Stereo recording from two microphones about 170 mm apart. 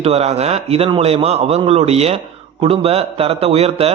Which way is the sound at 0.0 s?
40° right (ahead or behind).